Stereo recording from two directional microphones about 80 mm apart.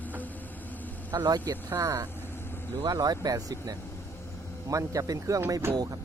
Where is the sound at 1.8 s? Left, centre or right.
Right.